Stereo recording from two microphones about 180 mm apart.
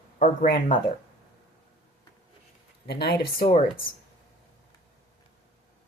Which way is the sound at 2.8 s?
60° left (ahead or behind).